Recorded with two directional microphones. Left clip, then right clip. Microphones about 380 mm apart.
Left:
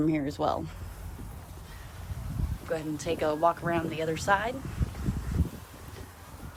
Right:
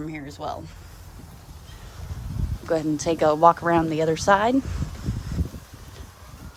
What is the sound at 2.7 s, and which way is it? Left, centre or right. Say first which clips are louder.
Speech: right 8 dB; centre.